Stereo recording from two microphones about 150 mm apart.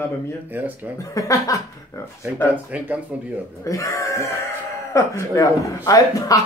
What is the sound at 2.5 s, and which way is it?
Speech, 10° right (ahead or behind).